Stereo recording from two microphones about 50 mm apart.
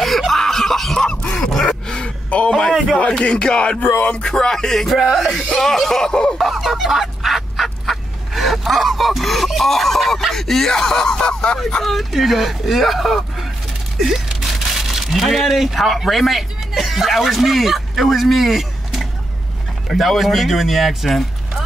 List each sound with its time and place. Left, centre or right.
0.0 s a sound: centre
2.3 s a man's voice: left
4.3 s speech: centre
5.5 s speech: centre
6.3 s fowl: centre
10.3 s speech: centre
11.8 s speech: centre